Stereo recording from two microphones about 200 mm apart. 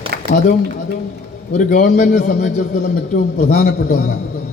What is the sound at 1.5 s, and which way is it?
A man's voice, 40° left (ahead or behind).